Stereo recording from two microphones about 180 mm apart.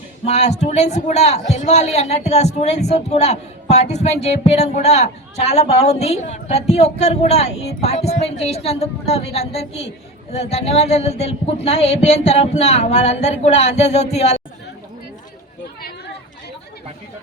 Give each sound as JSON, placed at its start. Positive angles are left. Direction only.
{"t": 0.3, "sound": "a man's voice", "side_deg": 40}